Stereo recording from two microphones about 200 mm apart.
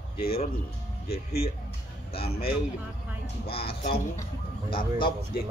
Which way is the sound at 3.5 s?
30° left (ahead or behind).